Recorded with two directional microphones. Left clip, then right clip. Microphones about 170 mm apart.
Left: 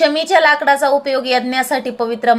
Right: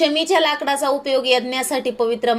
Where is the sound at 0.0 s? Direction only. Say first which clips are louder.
Left 5 dB; 25° right (ahead or behind).